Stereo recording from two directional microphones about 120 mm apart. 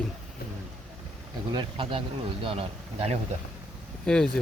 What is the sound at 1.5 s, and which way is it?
Speech, 45° right (ahead or behind).